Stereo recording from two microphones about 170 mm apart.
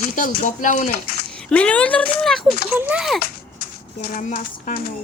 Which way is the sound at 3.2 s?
60° left (ahead or behind).